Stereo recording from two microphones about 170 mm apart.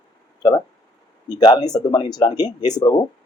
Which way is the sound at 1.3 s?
25° left (ahead or behind).